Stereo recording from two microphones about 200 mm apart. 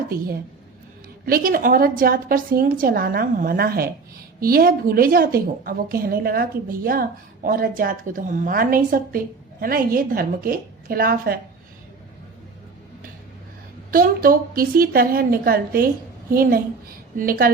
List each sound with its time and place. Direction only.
1.2 s a woman's voice: 45° right (ahead or behind)
13.9 s a woman's voice: 45° right (ahead or behind)